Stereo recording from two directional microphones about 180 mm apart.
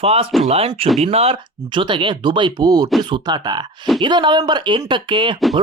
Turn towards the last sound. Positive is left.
turn(degrees=-25)  # may be behind; listen again after turning